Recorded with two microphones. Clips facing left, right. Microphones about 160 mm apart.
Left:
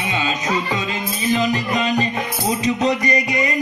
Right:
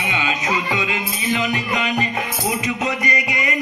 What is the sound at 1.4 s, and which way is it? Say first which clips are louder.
Music: left 3 dB; 35° left (ahead or behind).